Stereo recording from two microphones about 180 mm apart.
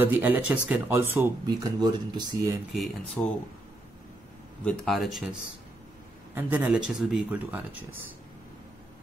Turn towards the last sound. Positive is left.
turn(degrees=-10)  # may be behind; listen again after turning